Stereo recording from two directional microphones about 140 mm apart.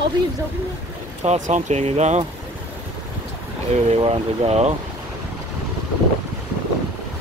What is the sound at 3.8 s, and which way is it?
Speech, 40° right (ahead or behind).